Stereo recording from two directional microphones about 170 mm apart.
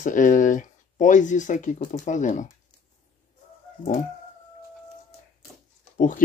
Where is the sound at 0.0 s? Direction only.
50° left (ahead or behind).